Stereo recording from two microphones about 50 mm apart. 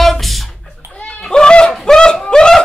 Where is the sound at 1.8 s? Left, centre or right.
Centre.